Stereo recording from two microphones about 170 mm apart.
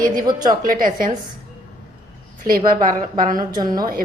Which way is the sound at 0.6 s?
55° right (ahead or behind).